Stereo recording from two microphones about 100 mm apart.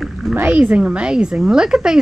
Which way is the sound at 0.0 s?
Centre (ahead or behind).